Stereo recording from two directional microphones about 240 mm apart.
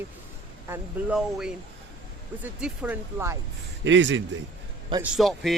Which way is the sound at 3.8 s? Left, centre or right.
Right.